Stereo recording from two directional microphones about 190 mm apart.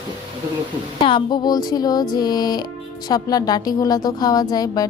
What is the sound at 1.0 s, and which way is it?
Speech, 25° left (ahead or behind).